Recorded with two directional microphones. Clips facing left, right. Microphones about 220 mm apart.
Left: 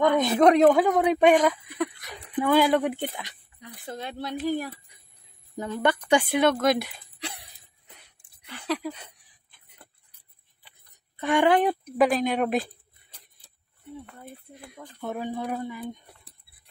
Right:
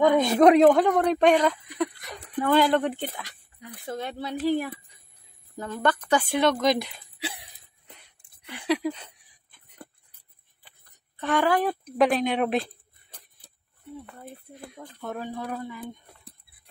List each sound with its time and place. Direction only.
0.0 s speech: 10° right (ahead or behind); by 3.3 s 15° left (ahead or behind)
3.8 s speech: centre (ahead or behind)
5.6 s speech: 10° left (ahead or behind)
8.5 s a sound: 15° right (ahead or behind)
11.1 s speech: 15° left (ahead or behind)
11.8 s speech: centre (ahead or behind)
14.5 s a sound: 5° right (ahead or behind)
15.0 s speech: 10° left (ahead or behind)